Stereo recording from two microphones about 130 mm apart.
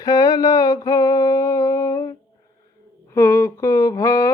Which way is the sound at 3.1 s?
20° left (ahead or behind).